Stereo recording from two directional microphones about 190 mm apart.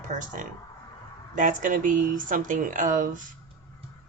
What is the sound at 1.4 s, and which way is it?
A woman's voice, 40° right (ahead or behind).